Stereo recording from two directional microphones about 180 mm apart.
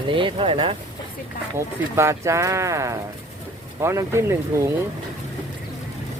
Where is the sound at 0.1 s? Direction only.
25° right (ahead or behind).